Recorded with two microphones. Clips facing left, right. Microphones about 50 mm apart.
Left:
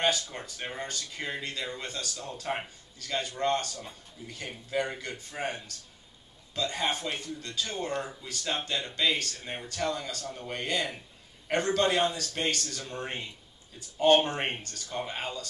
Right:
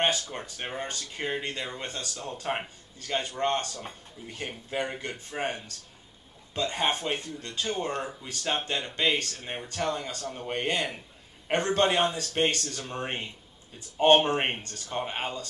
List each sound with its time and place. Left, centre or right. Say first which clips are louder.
0.0 s speech: right 1 dB; right